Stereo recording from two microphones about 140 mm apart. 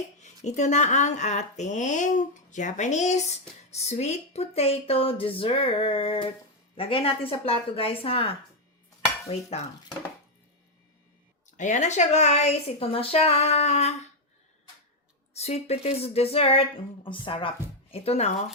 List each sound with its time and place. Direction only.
0.2 s speech: 55° left (ahead or behind)
11.5 s speech: 60° left (ahead or behind)
15.4 s speech: 50° left (ahead or behind)